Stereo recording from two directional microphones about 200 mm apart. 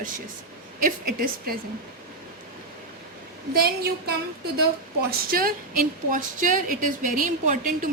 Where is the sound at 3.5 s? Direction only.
50° right (ahead or behind).